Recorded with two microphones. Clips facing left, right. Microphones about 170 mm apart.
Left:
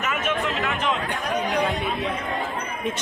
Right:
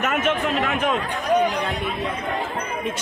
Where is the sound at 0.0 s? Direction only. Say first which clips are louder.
Right 4 dB; 55° right (ahead or behind).